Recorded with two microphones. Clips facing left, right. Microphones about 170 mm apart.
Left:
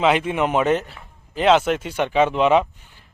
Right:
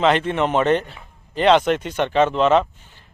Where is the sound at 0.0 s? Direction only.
10° left (ahead or behind).